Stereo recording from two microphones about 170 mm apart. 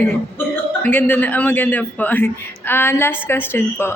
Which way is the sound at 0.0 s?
10° left (ahead or behind).